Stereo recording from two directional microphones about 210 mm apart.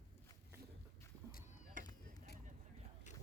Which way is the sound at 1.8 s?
40° right (ahead or behind).